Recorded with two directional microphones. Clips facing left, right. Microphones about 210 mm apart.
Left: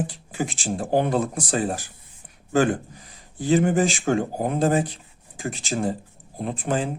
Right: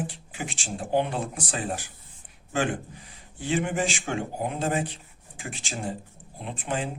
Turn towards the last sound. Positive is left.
turn(degrees=40)  # may be behind; listen again after turning